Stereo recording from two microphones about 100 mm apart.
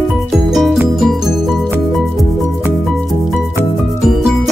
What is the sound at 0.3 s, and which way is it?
Music, centre (ahead or behind).